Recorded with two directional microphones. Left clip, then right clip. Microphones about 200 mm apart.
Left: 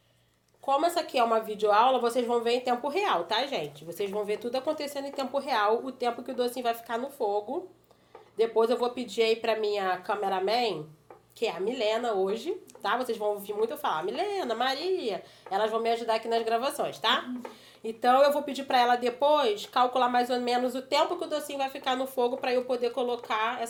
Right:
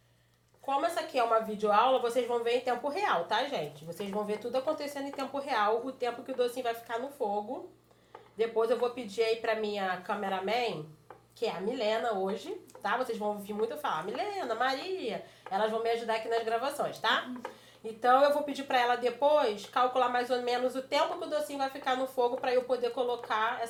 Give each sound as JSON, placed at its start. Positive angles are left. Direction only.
{"t": 0.6, "sound": "speech", "side_deg": 55}